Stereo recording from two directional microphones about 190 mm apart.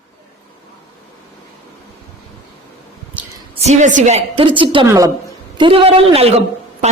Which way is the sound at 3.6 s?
40° right (ahead or behind).